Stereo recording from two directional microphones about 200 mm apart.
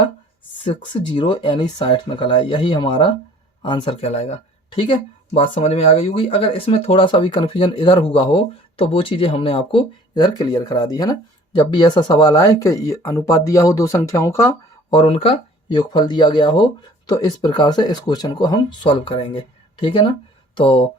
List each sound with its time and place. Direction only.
0.6 s speech: 25° left (ahead or behind)